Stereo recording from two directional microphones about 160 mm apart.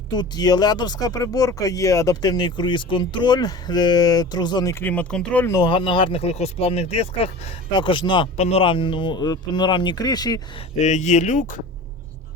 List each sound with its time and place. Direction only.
0.2 s speech: 25° left (ahead or behind)
4.7 s speech: 10° left (ahead or behind)
5.5 s speech: 30° left (ahead or behind)
10.8 s speech: 45° left (ahead or behind)